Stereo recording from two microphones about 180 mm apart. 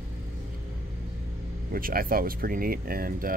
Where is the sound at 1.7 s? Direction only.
55° right (ahead or behind).